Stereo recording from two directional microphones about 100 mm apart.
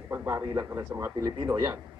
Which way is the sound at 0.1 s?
25° right (ahead or behind).